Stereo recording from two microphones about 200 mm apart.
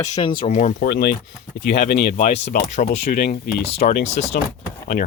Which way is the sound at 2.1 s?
35° left (ahead or behind).